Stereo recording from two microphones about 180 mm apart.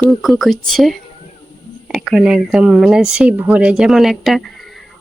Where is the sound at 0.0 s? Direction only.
Centre (ahead or behind).